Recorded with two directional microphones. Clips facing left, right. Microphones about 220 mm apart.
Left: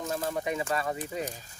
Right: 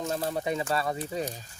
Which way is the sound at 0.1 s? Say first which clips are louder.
Even; 35° right (ahead or behind).